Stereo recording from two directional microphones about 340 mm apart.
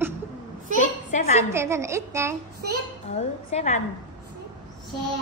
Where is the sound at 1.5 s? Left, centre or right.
Centre.